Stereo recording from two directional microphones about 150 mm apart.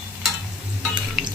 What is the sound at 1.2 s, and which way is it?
Drip, centre (ahead or behind).